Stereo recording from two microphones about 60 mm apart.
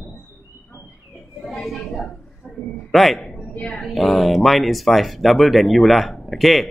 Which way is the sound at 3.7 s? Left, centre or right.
Centre.